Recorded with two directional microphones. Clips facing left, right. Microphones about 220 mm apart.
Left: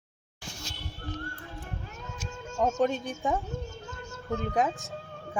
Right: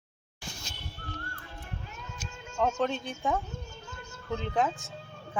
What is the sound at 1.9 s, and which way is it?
Music, 45° left (ahead or behind).